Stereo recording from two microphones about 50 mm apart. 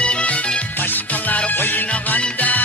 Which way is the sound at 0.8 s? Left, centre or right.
Left.